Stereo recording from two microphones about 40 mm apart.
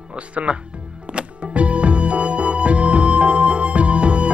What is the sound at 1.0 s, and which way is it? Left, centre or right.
Music, right.